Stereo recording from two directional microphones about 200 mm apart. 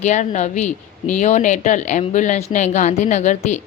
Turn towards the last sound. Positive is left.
turn(degrees=35)  # may be behind; listen again after turning